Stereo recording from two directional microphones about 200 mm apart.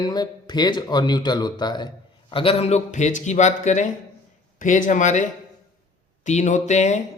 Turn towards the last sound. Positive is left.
turn(degrees=35)  # may be behind; listen again after turning